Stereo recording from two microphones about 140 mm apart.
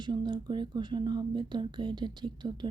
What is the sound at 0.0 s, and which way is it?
Speech, 30° right (ahead or behind).